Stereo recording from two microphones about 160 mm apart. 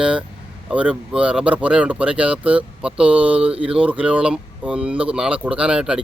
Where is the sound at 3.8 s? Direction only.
10° right (ahead or behind).